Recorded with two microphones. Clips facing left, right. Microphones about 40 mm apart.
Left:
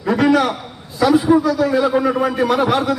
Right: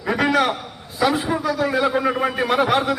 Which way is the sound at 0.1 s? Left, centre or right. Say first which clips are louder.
Left 4 dB; centre.